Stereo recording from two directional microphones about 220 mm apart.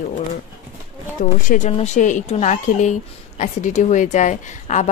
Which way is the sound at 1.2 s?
35° left (ahead or behind).